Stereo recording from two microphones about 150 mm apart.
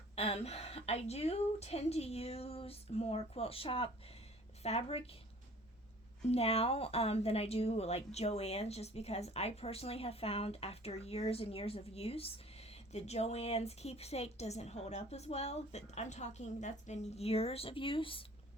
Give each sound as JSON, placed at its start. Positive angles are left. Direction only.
{"t": 0.2, "sound": "a woman's voice", "side_deg": 45}
{"t": 6.2, "sound": "speech", "side_deg": 40}